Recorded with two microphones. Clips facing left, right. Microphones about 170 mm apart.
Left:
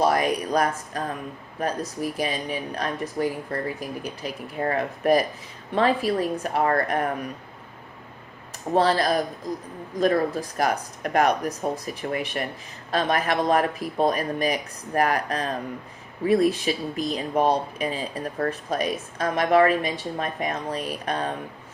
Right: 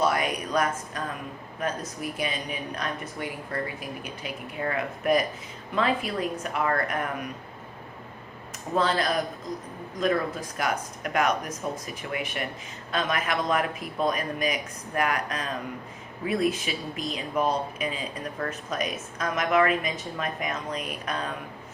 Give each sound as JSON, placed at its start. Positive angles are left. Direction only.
{"t": 0.0, "sound": "a sound", "side_deg": 40}
{"t": 1.5, "sound": "speech", "side_deg": 35}
{"t": 8.7, "sound": "speech", "side_deg": 35}